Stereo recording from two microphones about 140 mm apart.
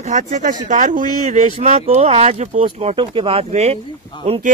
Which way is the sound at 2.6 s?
35° right (ahead or behind).